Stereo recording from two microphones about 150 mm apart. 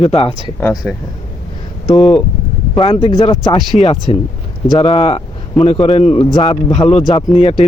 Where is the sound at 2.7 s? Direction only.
35° left (ahead or behind).